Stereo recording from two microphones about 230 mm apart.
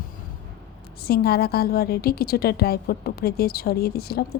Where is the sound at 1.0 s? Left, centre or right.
Left.